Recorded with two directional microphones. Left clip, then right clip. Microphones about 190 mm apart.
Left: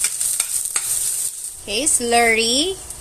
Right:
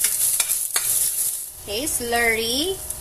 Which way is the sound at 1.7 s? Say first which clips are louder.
Left 5 dB; 45° left (ahead or behind).